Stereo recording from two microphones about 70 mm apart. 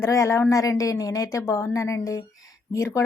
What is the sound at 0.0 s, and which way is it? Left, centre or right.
A woman's voice, left.